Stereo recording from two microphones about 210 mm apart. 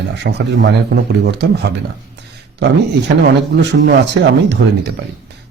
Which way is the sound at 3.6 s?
55° right (ahead or behind).